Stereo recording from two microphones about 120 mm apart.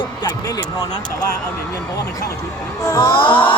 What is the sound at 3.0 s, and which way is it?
Speech, 45° left (ahead or behind).